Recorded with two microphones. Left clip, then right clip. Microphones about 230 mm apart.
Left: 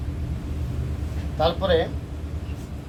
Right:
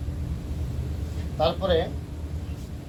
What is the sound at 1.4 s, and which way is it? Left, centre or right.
Speech, centre.